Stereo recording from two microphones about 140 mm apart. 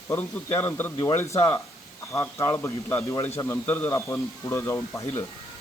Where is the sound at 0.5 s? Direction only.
15° left (ahead or behind).